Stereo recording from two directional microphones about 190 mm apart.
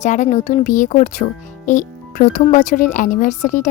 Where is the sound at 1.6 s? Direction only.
40° left (ahead or behind).